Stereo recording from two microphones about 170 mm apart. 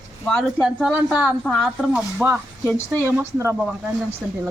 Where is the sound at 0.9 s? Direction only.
10° right (ahead or behind).